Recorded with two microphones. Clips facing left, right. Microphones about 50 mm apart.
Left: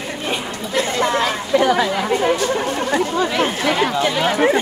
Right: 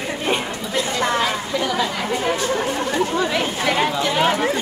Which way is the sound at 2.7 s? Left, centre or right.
Left.